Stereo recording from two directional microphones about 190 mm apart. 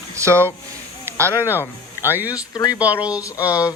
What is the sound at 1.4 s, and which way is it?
Speech, 15° left (ahead or behind).